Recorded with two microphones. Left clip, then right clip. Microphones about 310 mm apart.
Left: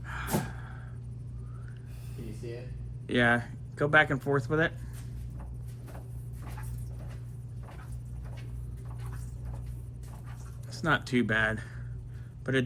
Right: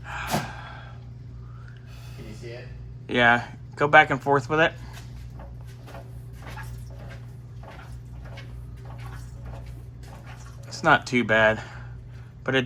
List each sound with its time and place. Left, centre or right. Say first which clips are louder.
0.0 s gasp: right 6 dB; centre
3.1 s speech: right 7 dB; centre
10.7 s speech: right 9 dB; centre